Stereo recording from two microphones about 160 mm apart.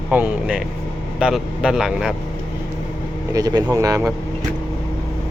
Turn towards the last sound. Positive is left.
turn(degrees=-20)  # may be behind; listen again after turning